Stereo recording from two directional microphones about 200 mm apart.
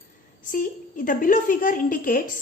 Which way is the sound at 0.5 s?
45° left (ahead or behind).